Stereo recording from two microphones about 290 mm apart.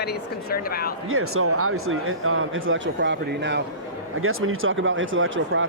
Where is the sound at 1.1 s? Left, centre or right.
Right.